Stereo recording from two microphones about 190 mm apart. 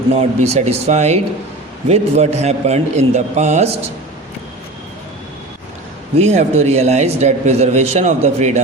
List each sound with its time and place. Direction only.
0.1 s speech: 35° right (ahead or behind)
6.1 s speech: 35° right (ahead or behind)